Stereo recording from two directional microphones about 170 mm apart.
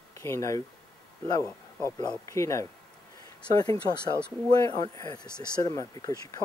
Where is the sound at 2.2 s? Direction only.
15° left (ahead or behind).